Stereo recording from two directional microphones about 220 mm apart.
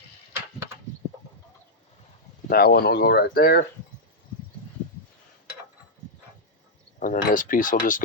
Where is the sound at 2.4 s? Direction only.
45° left (ahead or behind).